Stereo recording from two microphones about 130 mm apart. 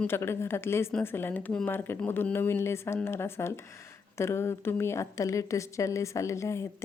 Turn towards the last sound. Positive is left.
turn(degrees=20)  # may be behind; listen again after turning